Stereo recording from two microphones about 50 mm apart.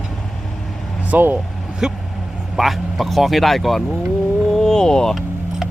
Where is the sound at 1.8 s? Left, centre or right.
Centre.